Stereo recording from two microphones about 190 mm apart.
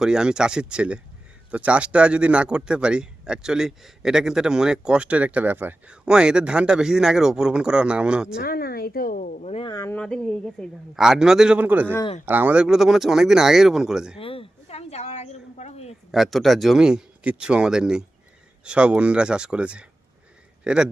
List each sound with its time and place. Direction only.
0.0 s speech: 5° right (ahead or behind)
8.4 s speech: 55° left (ahead or behind); by 9.9 s 20° left (ahead or behind)
9.9 s speech: 5° left (ahead or behind)
14.2 s a sound: 30° left (ahead or behind)
16.1 s speech: centre (ahead or behind)